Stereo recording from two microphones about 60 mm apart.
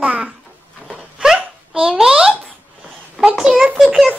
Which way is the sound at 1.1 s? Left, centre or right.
Centre.